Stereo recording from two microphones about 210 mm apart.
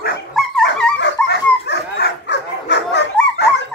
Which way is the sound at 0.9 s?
55° left (ahead or behind).